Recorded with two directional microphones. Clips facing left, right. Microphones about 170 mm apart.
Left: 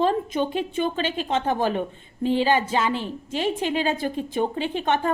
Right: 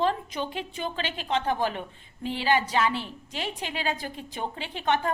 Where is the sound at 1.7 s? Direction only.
40° left (ahead or behind).